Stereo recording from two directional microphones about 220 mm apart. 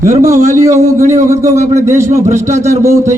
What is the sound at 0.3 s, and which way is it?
A man's voice, 35° right (ahead or behind).